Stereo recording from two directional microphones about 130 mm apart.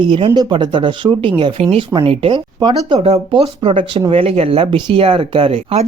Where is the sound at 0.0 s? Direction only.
40° right (ahead or behind).